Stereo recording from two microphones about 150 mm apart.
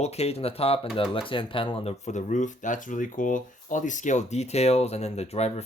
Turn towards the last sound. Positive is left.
turn(degrees=45)  # may be behind; listen again after turning